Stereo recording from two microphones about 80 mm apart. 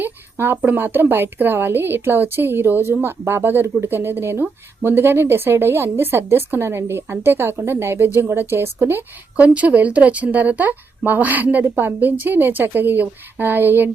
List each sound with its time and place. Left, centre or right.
0.0 s speech: right
9.3 s speech: centre